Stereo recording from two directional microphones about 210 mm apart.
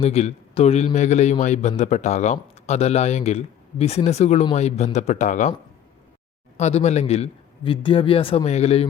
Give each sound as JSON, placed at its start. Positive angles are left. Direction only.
{"t": 0.0, "sound": "speech", "side_deg": 30}
{"t": 6.6, "sound": "a man's voice", "side_deg": 30}